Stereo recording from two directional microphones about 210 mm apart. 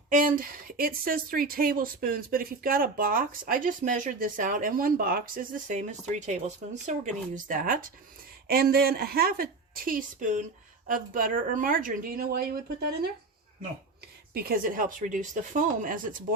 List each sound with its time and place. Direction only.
0.1 s speech: 40° right (ahead or behind)
14.3 s speech: 45° right (ahead or behind)